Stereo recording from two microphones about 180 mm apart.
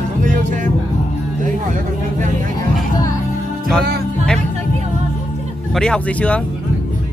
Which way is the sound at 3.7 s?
5° left (ahead or behind).